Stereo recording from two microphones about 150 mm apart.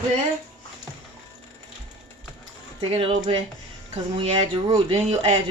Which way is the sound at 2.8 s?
40° right (ahead or behind).